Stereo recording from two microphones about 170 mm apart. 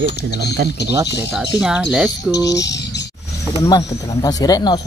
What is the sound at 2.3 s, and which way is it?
Speech, 20° left (ahead or behind).